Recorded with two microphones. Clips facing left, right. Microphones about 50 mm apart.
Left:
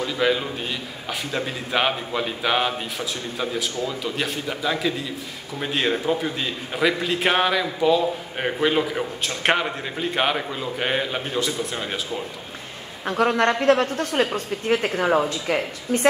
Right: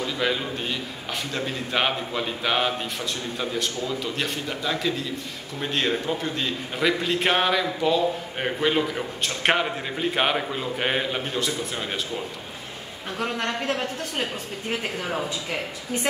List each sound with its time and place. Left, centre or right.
0.0 s a man's voice: centre
13.0 s a woman's voice: left
14.7 s a woman's voice: left